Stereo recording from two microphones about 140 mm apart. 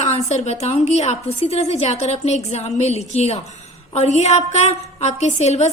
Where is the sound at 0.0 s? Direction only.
50° left (ahead or behind).